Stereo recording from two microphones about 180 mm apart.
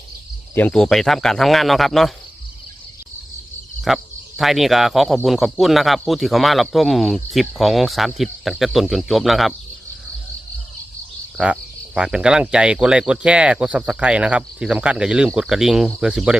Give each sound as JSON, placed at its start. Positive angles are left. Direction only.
{"t": 0.5, "sound": "speech", "side_deg": 5}
{"t": 3.8, "sound": "speech", "side_deg": 0}
{"t": 11.3, "sound": "speech", "side_deg": -5}